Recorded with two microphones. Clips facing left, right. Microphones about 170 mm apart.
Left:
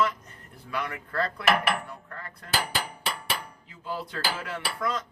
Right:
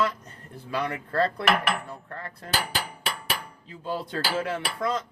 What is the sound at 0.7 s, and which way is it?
Dishes, 30° right (ahead or behind).